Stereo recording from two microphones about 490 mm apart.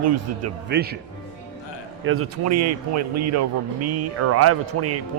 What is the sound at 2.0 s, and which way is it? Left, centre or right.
Speech, right.